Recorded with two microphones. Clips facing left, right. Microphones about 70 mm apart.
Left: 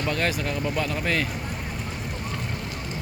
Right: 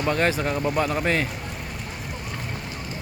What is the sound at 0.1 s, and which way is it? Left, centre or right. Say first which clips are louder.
Speech: right 5 dB; right.